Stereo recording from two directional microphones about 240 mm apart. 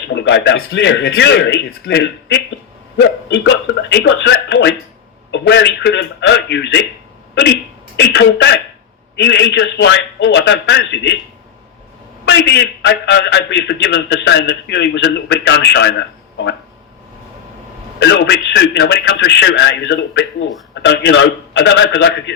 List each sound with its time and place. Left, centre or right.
0.1 s a man's voice: left
7.9 s a man's voice: left
12.2 s a man's voice: left
18.0 s a man's voice: left